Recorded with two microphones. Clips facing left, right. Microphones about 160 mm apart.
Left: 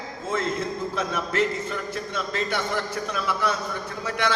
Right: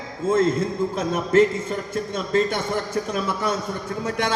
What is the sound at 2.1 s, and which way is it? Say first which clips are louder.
A man's voice: right 6 dB; 50° right (ahead or behind).